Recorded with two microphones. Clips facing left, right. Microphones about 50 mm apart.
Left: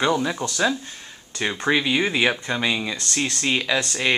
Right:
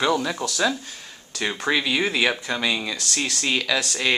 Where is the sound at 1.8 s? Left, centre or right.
Centre.